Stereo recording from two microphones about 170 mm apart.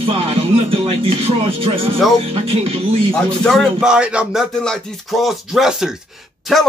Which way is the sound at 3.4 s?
Centre (ahead or behind).